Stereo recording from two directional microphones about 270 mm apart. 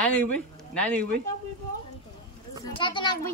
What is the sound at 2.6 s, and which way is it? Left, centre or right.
Speech, centre.